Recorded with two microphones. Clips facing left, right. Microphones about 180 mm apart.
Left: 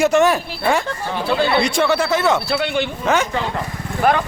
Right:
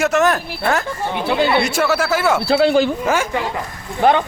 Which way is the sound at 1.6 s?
5° right (ahead or behind).